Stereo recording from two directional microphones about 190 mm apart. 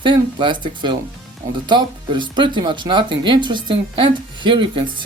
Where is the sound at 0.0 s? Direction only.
25° right (ahead or behind).